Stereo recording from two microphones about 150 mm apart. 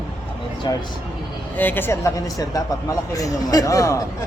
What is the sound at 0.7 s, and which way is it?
Speech, 30° left (ahead or behind).